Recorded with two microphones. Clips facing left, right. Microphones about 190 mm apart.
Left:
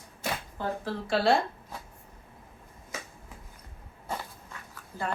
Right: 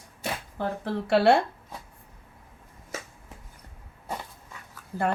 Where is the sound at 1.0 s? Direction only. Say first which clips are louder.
Right 5 dB; 65° right (ahead or behind).